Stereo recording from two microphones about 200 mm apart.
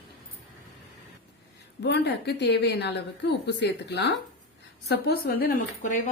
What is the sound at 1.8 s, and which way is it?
Speech, 60° left (ahead or behind).